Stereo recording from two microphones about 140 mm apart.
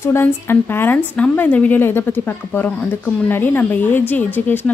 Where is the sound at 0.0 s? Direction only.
15° left (ahead or behind).